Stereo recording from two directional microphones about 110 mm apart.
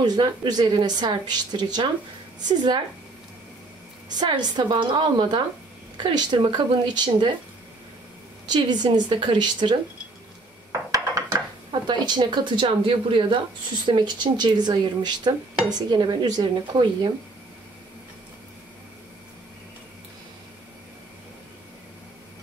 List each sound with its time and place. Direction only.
0.0 s speech: 40° right (ahead or behind)
4.1 s a woman's voice: 40° right (ahead or behind)
8.5 s a woman's voice: 40° right (ahead or behind)
10.9 s dishes: 35° right (ahead or behind); by 13.4 s 50° right (ahead or behind)
13.8 s speech: 45° right (ahead or behind)